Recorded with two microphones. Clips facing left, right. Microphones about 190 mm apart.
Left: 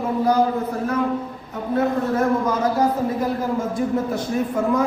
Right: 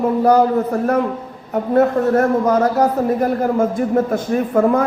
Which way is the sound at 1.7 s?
65° right (ahead or behind).